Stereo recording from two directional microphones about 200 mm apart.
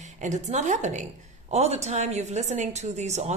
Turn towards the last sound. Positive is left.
turn(degrees=-35)  # may be behind; listen again after turning